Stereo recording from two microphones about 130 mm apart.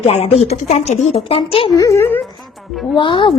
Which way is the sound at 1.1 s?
45° left (ahead or behind).